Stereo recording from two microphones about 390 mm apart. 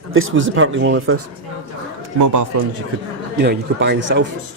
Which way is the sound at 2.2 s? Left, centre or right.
Right.